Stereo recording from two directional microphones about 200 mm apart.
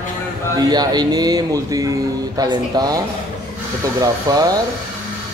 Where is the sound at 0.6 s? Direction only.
20° right (ahead or behind).